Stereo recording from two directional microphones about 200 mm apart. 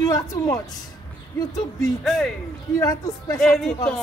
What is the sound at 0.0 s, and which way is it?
Speech, 15° left (ahead or behind).